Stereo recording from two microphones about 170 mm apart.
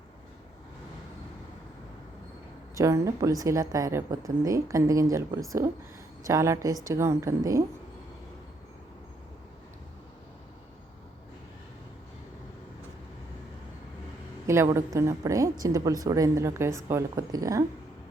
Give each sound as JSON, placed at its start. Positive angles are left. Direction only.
{"t": 2.7, "sound": "a woman's voice", "side_deg": -20}
{"t": 14.4, "sound": "a woman's voice", "side_deg": -15}